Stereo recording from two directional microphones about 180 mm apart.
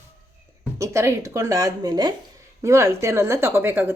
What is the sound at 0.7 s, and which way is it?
Speech, 15° right (ahead or behind).